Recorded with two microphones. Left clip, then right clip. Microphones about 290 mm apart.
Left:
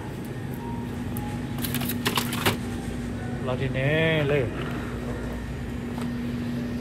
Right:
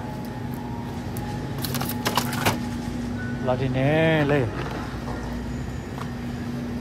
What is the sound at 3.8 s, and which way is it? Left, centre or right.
Speech, right.